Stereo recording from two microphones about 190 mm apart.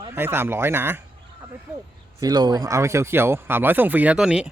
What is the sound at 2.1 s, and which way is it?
Speech, 20° right (ahead or behind).